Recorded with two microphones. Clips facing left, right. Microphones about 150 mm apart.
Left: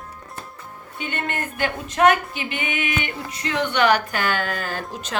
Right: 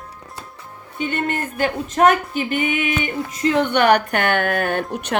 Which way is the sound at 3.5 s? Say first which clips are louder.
Right 3 dB; 55° right (ahead or behind).